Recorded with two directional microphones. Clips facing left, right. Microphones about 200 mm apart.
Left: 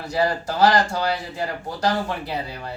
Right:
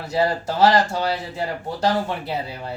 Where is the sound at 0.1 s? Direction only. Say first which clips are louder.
Right 1 dB; 25° right (ahead or behind).